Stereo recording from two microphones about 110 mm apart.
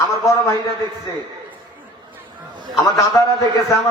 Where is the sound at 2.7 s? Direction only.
30° left (ahead or behind).